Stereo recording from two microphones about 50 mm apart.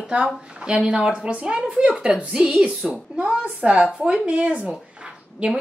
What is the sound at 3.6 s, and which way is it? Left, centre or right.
A woman's voice, right.